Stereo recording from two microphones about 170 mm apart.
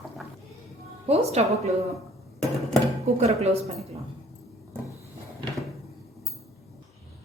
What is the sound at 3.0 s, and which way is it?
Speech, 40° right (ahead or behind).